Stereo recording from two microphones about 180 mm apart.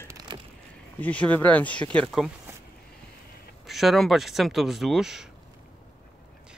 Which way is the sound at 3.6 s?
Centre (ahead or behind).